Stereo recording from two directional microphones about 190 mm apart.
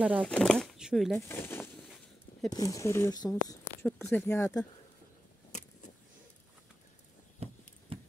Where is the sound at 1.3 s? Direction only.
10° left (ahead or behind).